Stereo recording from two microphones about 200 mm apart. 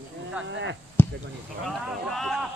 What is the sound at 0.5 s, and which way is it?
Speech, 65° right (ahead or behind).